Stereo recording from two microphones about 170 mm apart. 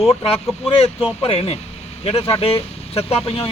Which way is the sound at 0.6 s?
35° left (ahead or behind).